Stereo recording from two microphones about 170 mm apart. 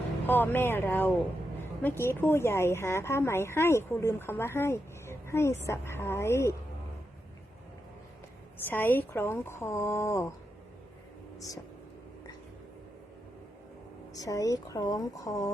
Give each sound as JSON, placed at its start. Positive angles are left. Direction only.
{"t": 0.3, "sound": "a woman's voice", "side_deg": 10}
{"t": 8.6, "sound": "a woman's voice", "side_deg": 10}
{"t": 14.1, "sound": "a woman's voice", "side_deg": 20}